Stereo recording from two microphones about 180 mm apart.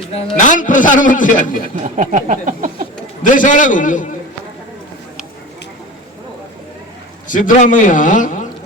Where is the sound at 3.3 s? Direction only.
45° left (ahead or behind).